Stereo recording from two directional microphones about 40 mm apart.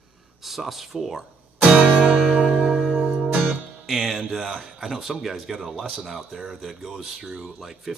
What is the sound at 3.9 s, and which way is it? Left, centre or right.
Speech, centre.